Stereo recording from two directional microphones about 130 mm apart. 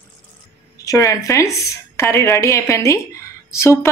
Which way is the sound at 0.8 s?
25° left (ahead or behind).